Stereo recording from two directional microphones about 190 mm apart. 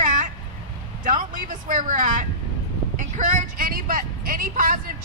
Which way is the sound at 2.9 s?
40° right (ahead or behind).